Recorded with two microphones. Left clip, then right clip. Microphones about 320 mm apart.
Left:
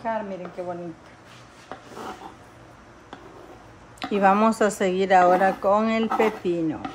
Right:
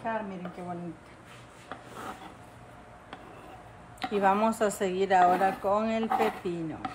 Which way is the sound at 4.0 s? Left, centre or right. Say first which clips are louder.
Left 6 dB; left.